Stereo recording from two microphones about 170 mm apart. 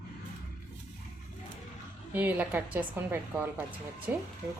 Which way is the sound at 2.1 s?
10° right (ahead or behind).